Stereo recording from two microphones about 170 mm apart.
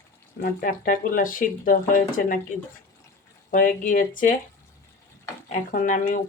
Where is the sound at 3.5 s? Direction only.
50° left (ahead or behind).